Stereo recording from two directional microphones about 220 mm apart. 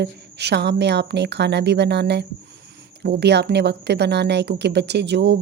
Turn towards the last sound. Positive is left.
turn(degrees=-50)  # may be behind; listen again after turning